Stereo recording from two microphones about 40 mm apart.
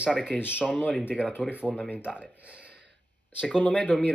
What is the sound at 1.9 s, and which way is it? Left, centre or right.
Speech, right.